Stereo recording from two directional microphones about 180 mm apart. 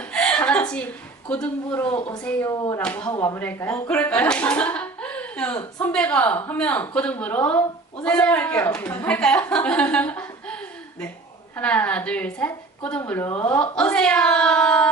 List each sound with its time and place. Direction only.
0.0 s chuckle: 5° left (ahead or behind)
1.3 s speech: 10° left (ahead or behind)
1.9 s speech: 30° left (ahead or behind)
2.2 s speech: 15° left (ahead or behind)
2.8 s speech: 5° left (ahead or behind)